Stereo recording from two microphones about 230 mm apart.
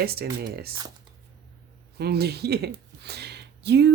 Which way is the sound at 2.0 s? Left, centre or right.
Right.